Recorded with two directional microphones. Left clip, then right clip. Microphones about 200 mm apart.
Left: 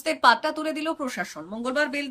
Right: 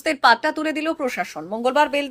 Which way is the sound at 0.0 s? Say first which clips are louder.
Right 3 dB; 10° right (ahead or behind).